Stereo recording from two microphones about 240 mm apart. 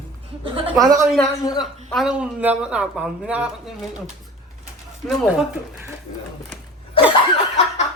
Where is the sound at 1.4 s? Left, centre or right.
Centre.